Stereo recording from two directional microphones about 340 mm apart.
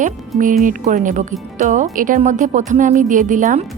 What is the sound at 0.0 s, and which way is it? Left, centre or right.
Speech, right.